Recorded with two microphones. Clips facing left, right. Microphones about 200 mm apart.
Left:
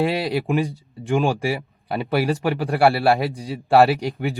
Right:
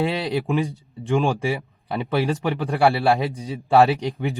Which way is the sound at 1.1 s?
Centre (ahead or behind).